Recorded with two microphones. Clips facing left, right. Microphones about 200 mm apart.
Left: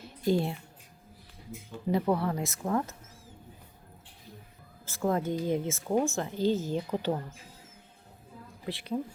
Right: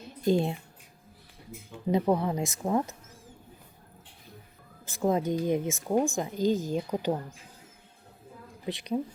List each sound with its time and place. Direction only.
0.0 s a sound: 20° right (ahead or behind)
1.9 s speech: 20° right (ahead or behind)
4.9 s speech: 20° right (ahead or behind)
8.6 s speech: 20° right (ahead or behind)